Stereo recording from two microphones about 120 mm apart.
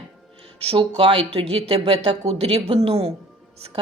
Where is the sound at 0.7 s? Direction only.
50° right (ahead or behind).